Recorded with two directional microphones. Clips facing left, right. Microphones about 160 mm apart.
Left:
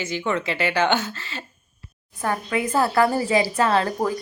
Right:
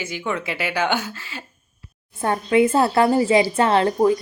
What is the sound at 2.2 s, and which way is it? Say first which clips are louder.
A woman's voice: right 7 dB; 25° right (ahead or behind).